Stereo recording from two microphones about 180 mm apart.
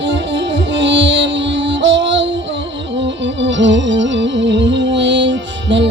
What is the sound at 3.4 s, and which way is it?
Music, 90° right.